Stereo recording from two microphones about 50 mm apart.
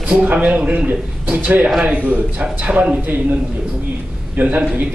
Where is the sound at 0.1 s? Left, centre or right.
Right.